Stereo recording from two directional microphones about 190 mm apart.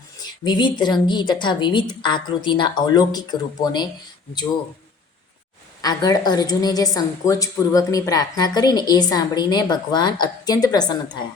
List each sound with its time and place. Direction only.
0.2 s a woman's voice: 20° left (ahead or behind)
5.8 s a woman's voice: 20° left (ahead or behind)